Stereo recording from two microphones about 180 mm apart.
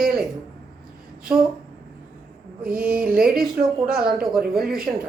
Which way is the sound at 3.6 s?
55° right (ahead or behind).